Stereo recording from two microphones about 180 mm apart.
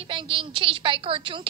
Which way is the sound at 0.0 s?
30° right (ahead or behind).